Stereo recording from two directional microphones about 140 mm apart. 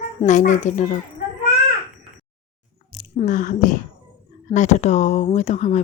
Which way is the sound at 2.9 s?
70° left (ahead or behind).